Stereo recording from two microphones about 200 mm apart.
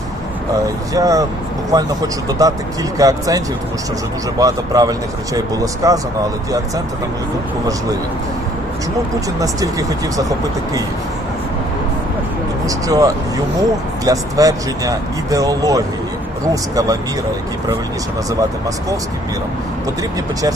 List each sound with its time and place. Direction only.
0.5 s speech: 15° right (ahead or behind)
9.4 s speech: 15° right (ahead or behind)
12.6 s speech: 15° right (ahead or behind)